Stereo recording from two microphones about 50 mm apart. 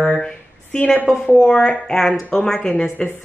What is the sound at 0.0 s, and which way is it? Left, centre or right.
Speech, centre.